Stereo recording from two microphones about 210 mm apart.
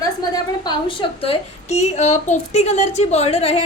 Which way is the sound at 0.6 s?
25° left (ahead or behind).